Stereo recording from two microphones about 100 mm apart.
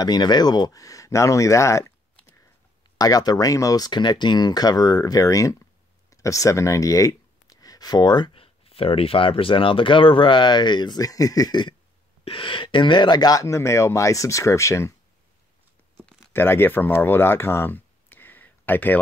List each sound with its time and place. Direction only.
0.0 s speech: 45° left (ahead or behind)
3.0 s speech: 40° left (ahead or behind)
12.3 s speech: 60° left (ahead or behind); by 15.0 s 30° left (ahead or behind)
16.3 s speech: 25° left (ahead or behind)